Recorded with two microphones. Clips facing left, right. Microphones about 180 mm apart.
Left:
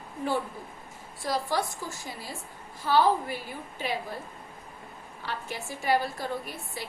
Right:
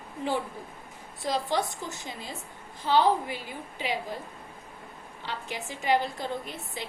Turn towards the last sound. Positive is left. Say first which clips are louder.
# even
turn(degrees=-20)  # may be behind; listen again after turning